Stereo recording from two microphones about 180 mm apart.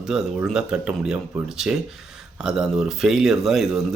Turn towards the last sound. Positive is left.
turn(degrees=0)  # may be behind; listen again after turning